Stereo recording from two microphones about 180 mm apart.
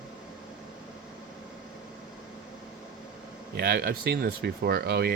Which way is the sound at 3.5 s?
60° right (ahead or behind).